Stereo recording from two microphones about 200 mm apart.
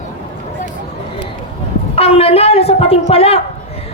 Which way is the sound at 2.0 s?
30° left (ahead or behind).